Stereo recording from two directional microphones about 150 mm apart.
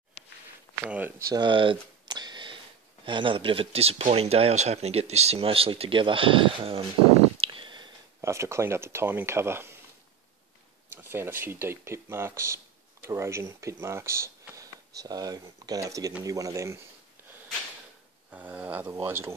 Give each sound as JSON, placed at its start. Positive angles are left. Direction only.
{"t": 0.8, "sound": "speech", "side_deg": -10}
{"t": 1.3, "sound": "camera", "side_deg": -30}
{"t": 3.1, "sound": "speech", "side_deg": -35}
{"t": 7.3, "sound": "a sound", "side_deg": -35}
{"t": 8.2, "sound": "speech", "side_deg": -20}
{"t": 11.0, "sound": "speech", "side_deg": -15}
{"t": 18.3, "sound": "speech", "side_deg": -10}